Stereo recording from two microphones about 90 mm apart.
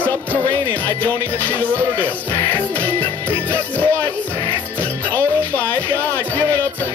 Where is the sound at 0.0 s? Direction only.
20° left (ahead or behind).